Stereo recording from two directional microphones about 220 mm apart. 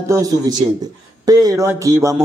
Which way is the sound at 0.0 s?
15° right (ahead or behind).